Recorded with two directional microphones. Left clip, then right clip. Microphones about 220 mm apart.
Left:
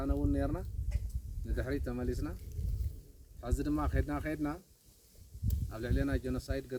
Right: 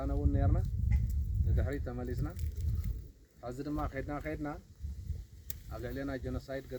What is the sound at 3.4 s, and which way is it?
Speech, 45° left (ahead or behind).